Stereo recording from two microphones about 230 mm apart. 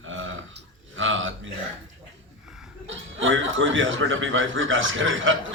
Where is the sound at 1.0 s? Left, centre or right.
Right.